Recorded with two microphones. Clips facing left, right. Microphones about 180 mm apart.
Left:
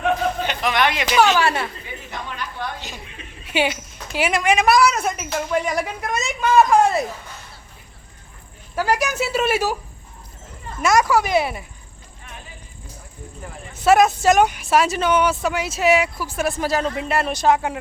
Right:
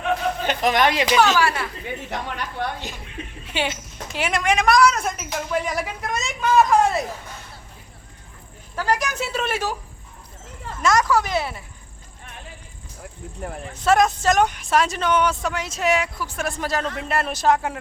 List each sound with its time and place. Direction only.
0.4 s speech: 45° right (ahead or behind)
1.4 s speech: 25° left (ahead or behind)
2.0 s a woman's voice: 70° right (ahead or behind)
3.4 s a woman's voice: 10° left (ahead or behind)
8.7 s a woman's voice: 10° left (ahead or behind)
10.8 s a woman's voice: 10° left (ahead or behind)
13.7 s speech: 5° left (ahead or behind)